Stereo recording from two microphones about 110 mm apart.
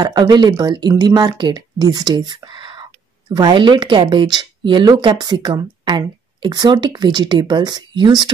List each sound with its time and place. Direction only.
0.0 s speech: 40° right (ahead or behind)